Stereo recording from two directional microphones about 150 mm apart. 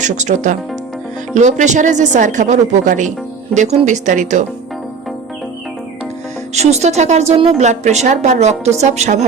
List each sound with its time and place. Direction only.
0.0 s a woman's voice: 55° right (ahead or behind)
6.5 s a woman's voice: 45° right (ahead or behind)